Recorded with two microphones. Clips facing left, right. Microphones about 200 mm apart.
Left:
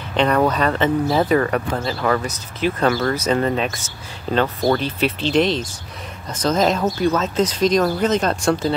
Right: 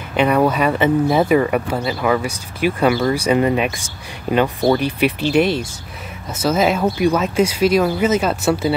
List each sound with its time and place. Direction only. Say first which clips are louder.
0.1 s speech: right 2 dB; 10° right (ahead or behind)